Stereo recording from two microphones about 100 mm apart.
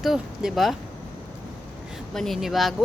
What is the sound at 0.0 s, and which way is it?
Speech, centre (ahead or behind).